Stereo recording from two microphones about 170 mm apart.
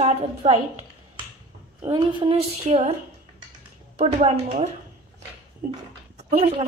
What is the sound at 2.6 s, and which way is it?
Speech, 45° right (ahead or behind).